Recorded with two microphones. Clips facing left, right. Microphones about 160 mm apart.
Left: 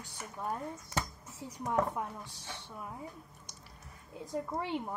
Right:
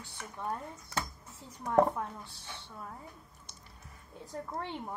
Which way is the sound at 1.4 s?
15° left (ahead or behind).